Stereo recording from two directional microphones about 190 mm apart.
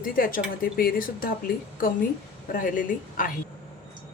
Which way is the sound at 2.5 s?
45° left (ahead or behind).